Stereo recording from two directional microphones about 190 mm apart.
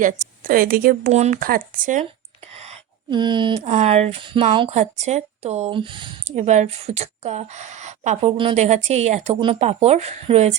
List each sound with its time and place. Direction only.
0.0 s speech: 45° right (ahead or behind)
2.6 s speech: 30° right (ahead or behind)
4.7 s speech: 35° right (ahead or behind)